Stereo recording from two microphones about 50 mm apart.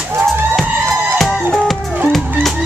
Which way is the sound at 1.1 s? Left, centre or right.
Centre.